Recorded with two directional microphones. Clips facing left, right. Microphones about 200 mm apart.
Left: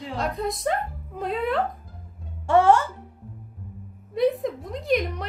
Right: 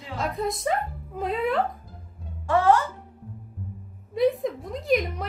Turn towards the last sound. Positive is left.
turn(degrees=0)  # may be behind; listen again after turning